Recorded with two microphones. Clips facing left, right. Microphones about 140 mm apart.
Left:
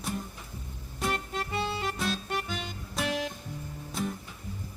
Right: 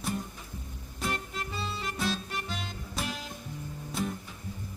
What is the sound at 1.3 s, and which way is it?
Music, 65° left (ahead or behind).